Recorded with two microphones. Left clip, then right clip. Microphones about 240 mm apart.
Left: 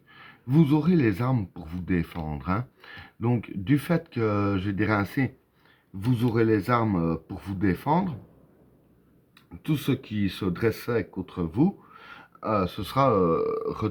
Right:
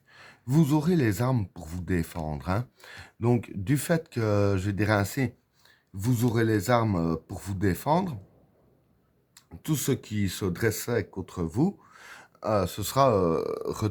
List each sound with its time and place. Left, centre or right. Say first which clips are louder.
0.1 s speech: left 2 dB; right
9.6 s speech: left 1 dB; right